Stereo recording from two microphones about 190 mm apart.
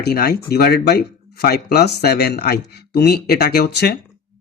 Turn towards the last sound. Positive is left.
turn(degrees=55)  # may be behind; listen again after turning